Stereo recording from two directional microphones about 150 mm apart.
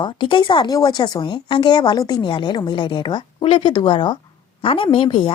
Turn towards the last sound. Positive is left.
turn(degrees=35)  # may be behind; listen again after turning